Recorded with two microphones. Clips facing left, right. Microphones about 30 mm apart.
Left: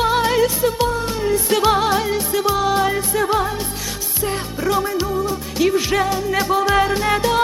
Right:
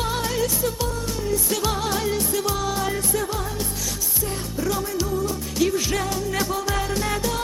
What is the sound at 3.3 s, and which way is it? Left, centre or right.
Music, left.